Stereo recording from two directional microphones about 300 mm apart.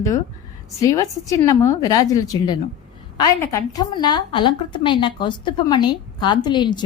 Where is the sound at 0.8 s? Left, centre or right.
Centre.